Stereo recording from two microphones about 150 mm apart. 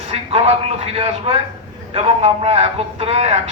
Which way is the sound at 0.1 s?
40° right (ahead or behind).